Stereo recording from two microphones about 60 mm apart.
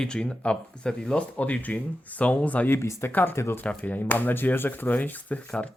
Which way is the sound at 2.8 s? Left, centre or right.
Left.